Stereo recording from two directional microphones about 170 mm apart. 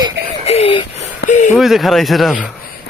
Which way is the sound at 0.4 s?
35° left (ahead or behind).